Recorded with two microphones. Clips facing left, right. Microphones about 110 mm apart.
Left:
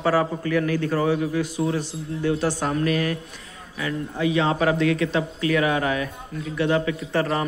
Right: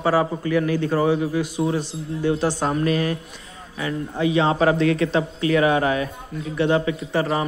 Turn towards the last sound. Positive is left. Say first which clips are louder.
# right 1 dB
turn(degrees=-15)  # may be behind; listen again after turning